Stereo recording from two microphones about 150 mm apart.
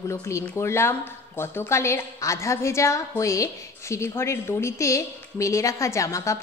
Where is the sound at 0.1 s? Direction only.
20° left (ahead or behind).